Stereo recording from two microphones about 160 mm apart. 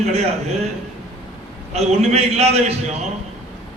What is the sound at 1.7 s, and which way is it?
A man's voice, 40° right (ahead or behind).